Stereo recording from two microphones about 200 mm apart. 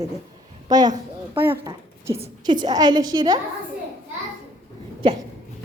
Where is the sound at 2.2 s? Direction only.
20° right (ahead or behind).